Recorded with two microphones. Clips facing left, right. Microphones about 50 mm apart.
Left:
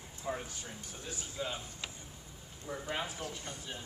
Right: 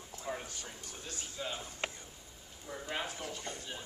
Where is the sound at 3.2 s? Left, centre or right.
Right.